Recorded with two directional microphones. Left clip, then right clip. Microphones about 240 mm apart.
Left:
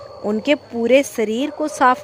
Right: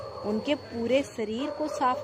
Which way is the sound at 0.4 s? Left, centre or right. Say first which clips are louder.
Left 14 dB; left.